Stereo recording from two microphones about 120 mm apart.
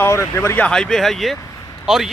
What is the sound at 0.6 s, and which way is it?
Speech, 5° left (ahead or behind).